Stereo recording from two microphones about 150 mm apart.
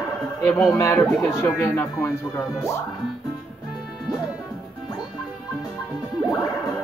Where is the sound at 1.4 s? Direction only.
15° left (ahead or behind).